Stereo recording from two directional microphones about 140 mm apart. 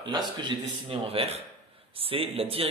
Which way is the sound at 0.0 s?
30° right (ahead or behind).